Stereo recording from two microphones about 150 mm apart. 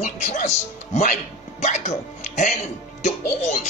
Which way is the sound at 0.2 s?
50° left (ahead or behind).